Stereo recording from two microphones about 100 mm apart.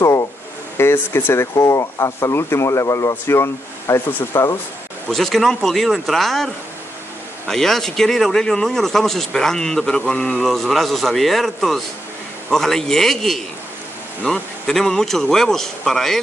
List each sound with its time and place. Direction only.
0.0 s a sound: 35° left (ahead or behind)
0.7 s speech: 25° left (ahead or behind)
5.1 s speech: 5° left (ahead or behind)